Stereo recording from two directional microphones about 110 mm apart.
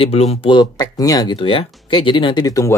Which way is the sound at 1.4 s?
55° left (ahead or behind).